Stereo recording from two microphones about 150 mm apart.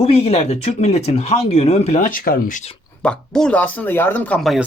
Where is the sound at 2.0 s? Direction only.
65° left (ahead or behind).